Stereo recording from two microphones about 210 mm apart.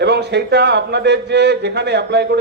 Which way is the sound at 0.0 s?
50° right (ahead or behind).